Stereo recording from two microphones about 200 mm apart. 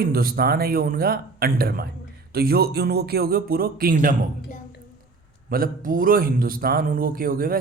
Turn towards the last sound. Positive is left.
turn(degrees=-45)  # may be behind; listen again after turning